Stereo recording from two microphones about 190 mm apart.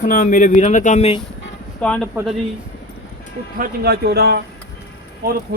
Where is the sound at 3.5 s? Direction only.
50° right (ahead or behind).